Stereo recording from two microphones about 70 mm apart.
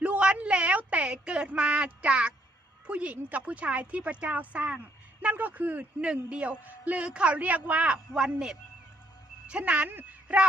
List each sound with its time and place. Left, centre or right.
0.0 s a sound: centre
2.8 s a woman's voice: centre
7.9 s a man's voice: centre